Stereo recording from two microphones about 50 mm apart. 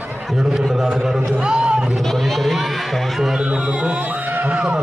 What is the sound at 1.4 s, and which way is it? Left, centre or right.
Speech, centre.